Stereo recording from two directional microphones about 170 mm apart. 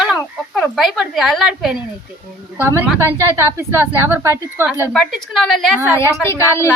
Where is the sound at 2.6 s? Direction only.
15° right (ahead or behind).